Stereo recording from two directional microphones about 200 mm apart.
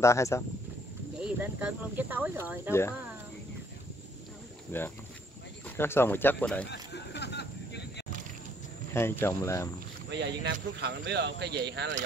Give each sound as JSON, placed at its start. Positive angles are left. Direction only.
{"t": 0.0, "sound": "speech", "side_deg": 15}
{"t": 1.2, "sound": "speech", "side_deg": -5}
{"t": 4.6, "sound": "speech", "side_deg": 10}
{"t": 6.7, "sound": "a sound", "side_deg": 60}
{"t": 8.9, "sound": "speech", "side_deg": 10}
{"t": 10.1, "sound": "speech", "side_deg": -60}